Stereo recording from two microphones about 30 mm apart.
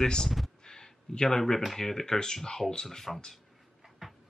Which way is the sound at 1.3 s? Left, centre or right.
Centre.